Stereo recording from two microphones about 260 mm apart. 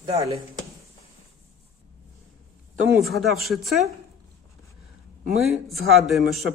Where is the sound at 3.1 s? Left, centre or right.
Centre.